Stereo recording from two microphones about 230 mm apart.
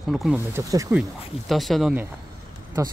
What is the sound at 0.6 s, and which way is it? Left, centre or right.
Speech, centre.